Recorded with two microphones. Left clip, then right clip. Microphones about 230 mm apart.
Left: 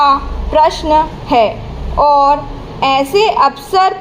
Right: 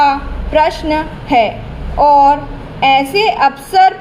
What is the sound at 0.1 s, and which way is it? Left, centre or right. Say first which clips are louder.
A woman's voice: left 2 dB; left.